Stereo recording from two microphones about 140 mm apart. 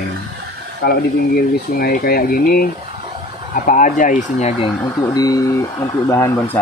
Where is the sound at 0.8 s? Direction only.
90° left.